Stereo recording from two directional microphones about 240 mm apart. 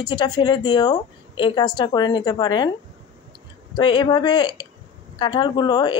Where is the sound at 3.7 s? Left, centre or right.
Centre.